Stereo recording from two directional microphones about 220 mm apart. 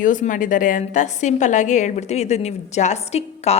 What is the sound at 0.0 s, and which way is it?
A woman's voice, 35° left (ahead or behind).